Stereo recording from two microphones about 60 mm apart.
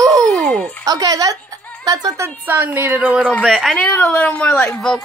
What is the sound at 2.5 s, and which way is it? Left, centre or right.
Speech, right.